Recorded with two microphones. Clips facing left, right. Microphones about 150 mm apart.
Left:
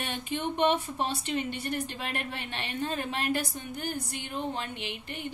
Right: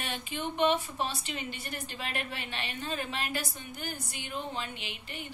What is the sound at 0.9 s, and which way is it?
A woman's voice, 55° left (ahead or behind).